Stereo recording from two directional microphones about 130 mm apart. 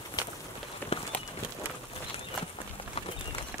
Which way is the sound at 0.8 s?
15° left (ahead or behind).